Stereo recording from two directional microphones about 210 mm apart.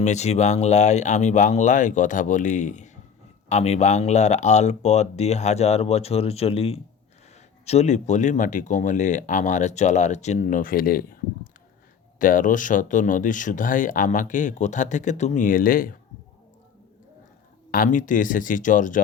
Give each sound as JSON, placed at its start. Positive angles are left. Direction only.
{"t": 0.0, "sound": "speech", "side_deg": 35}
{"t": 12.2, "sound": "speech", "side_deg": 40}
{"t": 17.7, "sound": "speech", "side_deg": 40}